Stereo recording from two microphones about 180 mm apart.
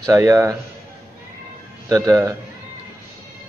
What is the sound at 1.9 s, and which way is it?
Speech, 20° right (ahead or behind).